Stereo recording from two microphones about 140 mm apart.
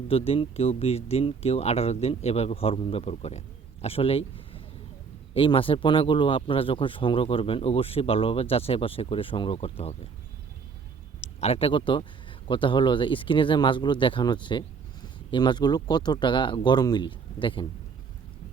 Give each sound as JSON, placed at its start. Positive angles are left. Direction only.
{"t": 0.1, "sound": "speech", "side_deg": 45}
{"t": 11.2, "sound": "speech", "side_deg": 50}